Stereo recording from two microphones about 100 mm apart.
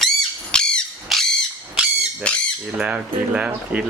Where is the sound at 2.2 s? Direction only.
10° left (ahead or behind).